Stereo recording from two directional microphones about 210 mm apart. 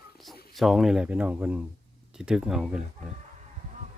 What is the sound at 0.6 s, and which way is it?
Speech, centre (ahead or behind).